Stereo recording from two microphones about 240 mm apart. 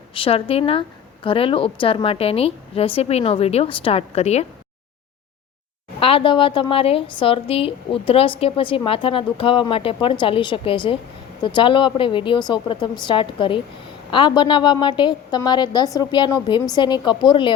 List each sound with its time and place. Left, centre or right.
0.1 s a woman's voice: left
6.0 s a woman's voice: left